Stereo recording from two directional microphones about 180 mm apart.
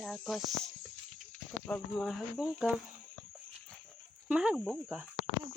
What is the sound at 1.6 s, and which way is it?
Speech, 5° left (ahead or behind).